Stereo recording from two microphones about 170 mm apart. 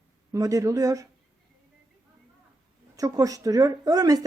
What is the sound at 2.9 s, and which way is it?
Speech, 20° right (ahead or behind).